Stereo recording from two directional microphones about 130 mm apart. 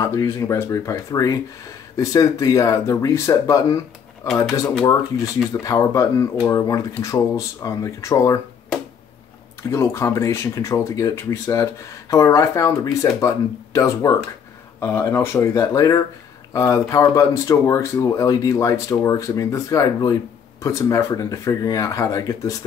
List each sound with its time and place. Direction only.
0.0 s speech: 25° left (ahead or behind)
5.5 s speech: 25° left (ahead or behind)
9.6 s speech: 20° left (ahead or behind)